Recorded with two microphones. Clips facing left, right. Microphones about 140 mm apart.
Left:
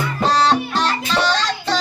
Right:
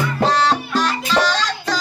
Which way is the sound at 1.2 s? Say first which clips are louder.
Even; 25° left (ahead or behind).